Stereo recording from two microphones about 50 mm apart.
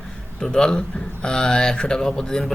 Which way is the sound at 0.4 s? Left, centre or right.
Centre.